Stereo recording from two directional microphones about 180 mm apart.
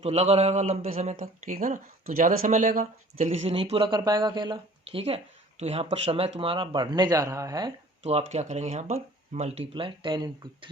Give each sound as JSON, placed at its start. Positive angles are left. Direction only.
{"t": 0.0, "sound": "speech", "side_deg": -35}
{"t": 3.2, "sound": "speech", "side_deg": -30}
{"t": 8.3, "sound": "speech", "side_deg": -40}